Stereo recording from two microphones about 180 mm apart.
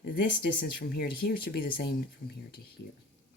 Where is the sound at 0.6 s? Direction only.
60° left (ahead or behind).